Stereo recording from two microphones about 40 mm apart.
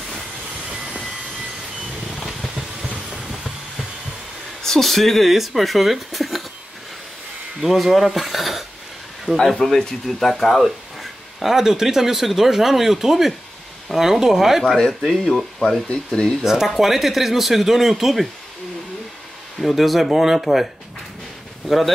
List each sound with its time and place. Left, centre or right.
0.7 s train: centre
3.3 s train: centre
4.6 s speech: centre
7.6 s speech: centre
9.6 s speech: centre
15.0 s speech: centre
15.9 s speech: left
16.4 s speech: centre
19.6 s speech: centre
21.6 s speech: centre